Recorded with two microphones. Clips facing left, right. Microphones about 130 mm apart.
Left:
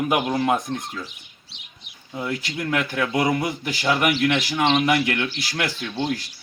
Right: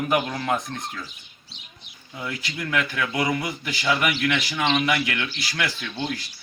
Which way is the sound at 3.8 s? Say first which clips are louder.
Left 3 dB; 35° left (ahead or behind).